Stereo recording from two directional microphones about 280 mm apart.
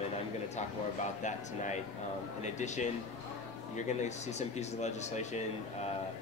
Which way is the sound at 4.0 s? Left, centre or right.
Left.